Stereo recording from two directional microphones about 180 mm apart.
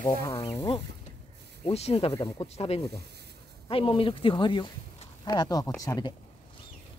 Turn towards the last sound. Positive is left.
turn(degrees=20)  # may be behind; listen again after turning